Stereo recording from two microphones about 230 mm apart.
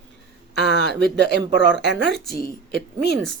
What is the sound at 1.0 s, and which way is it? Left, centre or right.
Speech, right.